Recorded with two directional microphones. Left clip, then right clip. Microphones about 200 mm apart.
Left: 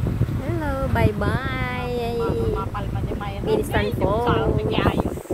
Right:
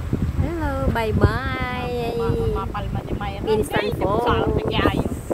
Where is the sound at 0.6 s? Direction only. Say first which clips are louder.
Even; centre (ahead or behind).